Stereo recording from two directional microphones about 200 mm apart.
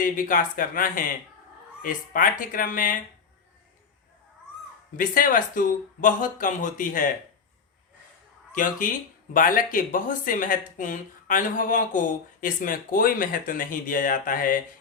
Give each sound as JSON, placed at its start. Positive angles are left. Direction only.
{"t": 0.0, "sound": "speech", "side_deg": 45}
{"t": 4.9, "sound": "speech", "side_deg": 45}
{"t": 8.5, "sound": "speech", "side_deg": 40}